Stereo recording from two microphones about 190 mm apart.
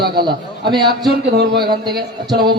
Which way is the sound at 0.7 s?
25° right (ahead or behind).